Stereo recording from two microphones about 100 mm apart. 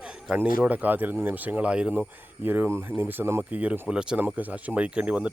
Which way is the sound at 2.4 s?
20° right (ahead or behind).